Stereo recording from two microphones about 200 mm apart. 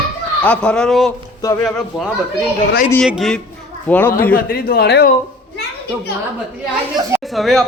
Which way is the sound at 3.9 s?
10° left (ahead or behind).